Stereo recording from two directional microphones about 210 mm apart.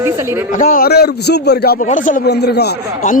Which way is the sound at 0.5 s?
40° left (ahead or behind).